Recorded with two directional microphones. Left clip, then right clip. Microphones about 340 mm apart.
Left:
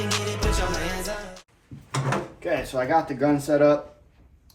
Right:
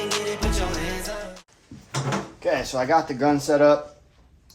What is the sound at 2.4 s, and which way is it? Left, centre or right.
Speech, centre.